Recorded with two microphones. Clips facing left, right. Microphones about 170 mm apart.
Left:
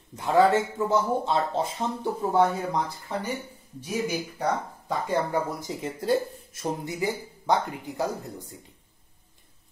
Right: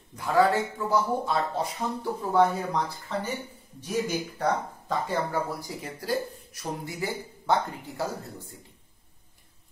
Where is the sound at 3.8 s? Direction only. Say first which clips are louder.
Even; 10° left (ahead or behind).